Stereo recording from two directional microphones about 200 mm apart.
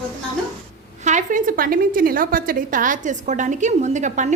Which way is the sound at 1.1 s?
40° right (ahead or behind).